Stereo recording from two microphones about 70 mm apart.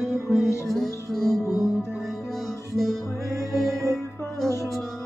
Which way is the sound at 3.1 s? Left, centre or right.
Right.